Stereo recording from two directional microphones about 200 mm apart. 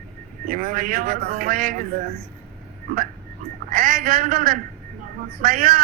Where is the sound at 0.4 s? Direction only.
45° right (ahead or behind).